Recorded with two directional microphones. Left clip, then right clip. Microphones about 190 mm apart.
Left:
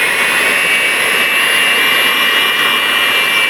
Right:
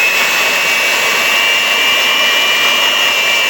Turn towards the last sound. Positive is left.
turn(degrees=20)  # may be behind; listen again after turning